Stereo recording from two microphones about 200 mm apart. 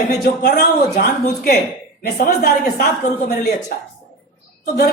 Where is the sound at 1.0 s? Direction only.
50° left (ahead or behind).